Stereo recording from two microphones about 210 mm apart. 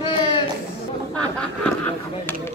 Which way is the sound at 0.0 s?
25° left (ahead or behind).